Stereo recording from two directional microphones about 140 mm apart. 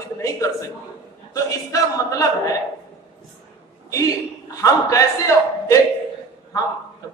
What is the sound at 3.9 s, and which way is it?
A woman's voice, 25° left (ahead or behind).